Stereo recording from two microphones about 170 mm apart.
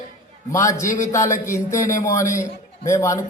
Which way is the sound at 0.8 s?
45° left (ahead or behind).